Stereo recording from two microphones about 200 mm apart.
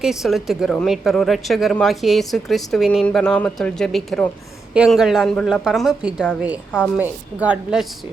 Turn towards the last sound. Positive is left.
turn(degrees=-5)  # may be behind; listen again after turning